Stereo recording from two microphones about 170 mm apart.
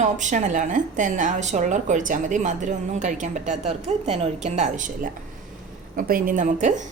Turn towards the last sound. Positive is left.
turn(degrees=-45)  # may be behind; listen again after turning